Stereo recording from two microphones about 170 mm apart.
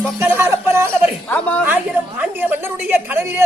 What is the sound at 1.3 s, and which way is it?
Speech, 5° left (ahead or behind).